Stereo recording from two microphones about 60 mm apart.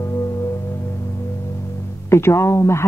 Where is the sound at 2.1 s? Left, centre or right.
Left.